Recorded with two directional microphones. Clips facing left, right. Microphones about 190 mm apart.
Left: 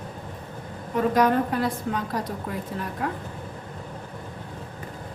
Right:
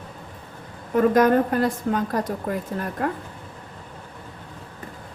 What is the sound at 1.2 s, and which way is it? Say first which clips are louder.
A woman's voice: right 2 dB; 50° right (ahead or behind).